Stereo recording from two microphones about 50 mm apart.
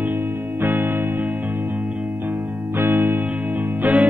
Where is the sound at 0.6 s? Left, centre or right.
Right.